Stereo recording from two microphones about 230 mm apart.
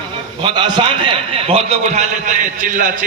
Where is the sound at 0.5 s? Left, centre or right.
Right.